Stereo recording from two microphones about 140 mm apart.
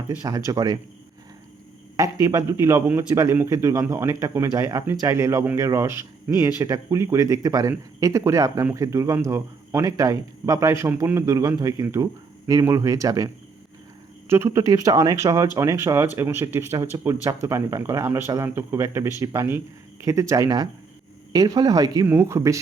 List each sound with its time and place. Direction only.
0.2 s speech: 25° right (ahead or behind)
2.2 s speech: 20° right (ahead or behind)